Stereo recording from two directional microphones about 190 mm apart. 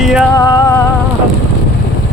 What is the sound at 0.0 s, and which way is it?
Music, centre (ahead or behind).